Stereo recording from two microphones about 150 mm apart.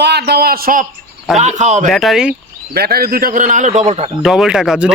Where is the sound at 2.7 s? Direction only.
90° right; by 4.1 s 50° right (ahead or behind).